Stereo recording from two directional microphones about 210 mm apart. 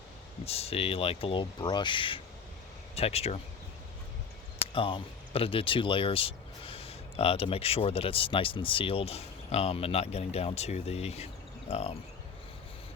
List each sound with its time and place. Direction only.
0.4 s speech: 30° left (ahead or behind)
4.7 s speech: 25° left (ahead or behind)